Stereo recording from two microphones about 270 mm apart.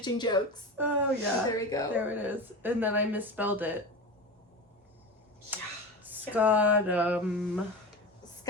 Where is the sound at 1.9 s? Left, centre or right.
Centre.